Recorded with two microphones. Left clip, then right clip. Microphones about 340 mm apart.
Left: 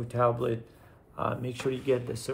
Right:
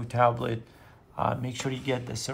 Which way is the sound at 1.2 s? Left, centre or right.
Right.